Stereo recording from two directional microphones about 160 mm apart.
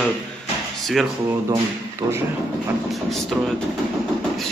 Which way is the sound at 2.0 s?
20° right (ahead or behind).